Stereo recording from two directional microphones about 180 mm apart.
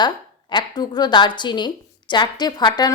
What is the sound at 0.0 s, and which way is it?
Speech, 25° left (ahead or behind).